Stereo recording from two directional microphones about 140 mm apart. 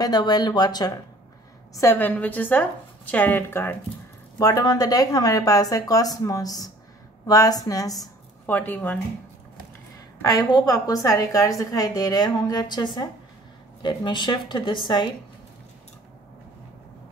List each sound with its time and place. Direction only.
0.0 s a woman's voice: 30° left (ahead or behind)
1.8 s a woman's voice: 15° left (ahead or behind)
8.5 s a woman's voice: 15° left (ahead or behind)
10.2 s a woman's voice: 25° left (ahead or behind)